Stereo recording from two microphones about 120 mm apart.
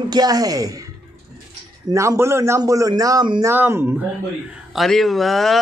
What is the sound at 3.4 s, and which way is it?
Speech, 20° right (ahead or behind).